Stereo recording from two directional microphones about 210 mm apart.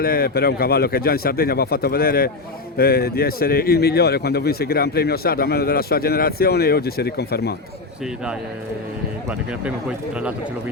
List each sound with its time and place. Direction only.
0.0 s speech: 45° left (ahead or behind)